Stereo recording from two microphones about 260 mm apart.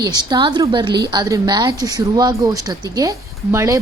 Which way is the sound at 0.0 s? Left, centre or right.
Centre.